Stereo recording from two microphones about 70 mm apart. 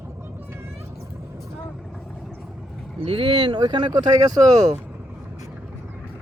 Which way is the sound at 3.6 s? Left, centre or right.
Right.